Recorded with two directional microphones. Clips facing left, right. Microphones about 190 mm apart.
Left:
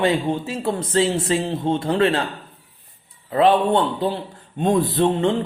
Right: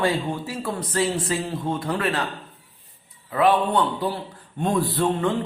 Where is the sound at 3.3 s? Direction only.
25° left (ahead or behind).